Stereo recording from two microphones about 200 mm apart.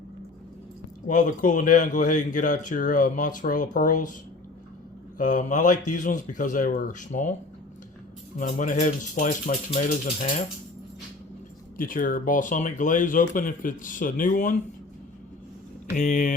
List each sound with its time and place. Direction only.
1.0 s speech: 40° left (ahead or behind)
5.1 s speech: 40° left (ahead or behind)
8.4 s speech: 40° left (ahead or behind)
11.8 s speech: 45° left (ahead or behind)
16.0 s speech: 40° left (ahead or behind)